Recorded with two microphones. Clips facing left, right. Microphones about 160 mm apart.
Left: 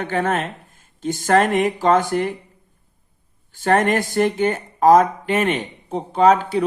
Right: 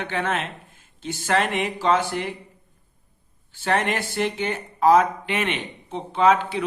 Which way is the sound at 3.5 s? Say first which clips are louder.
Left 6 dB; 45° left (ahead or behind).